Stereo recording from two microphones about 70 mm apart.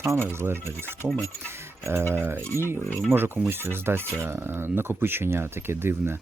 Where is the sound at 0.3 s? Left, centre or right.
Right.